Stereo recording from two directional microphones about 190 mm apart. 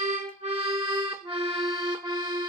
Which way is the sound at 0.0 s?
35° right (ahead or behind).